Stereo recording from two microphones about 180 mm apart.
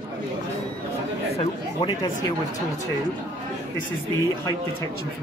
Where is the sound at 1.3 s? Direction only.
30° left (ahead or behind).